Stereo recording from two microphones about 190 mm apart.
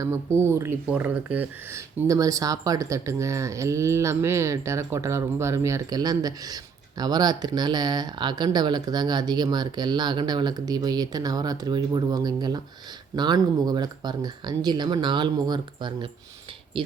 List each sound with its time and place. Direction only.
0.0 s speech: 15° right (ahead or behind)